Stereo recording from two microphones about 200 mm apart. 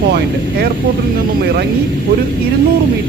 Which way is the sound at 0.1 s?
55° right (ahead or behind).